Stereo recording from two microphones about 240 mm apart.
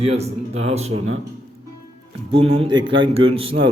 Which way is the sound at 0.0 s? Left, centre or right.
Right.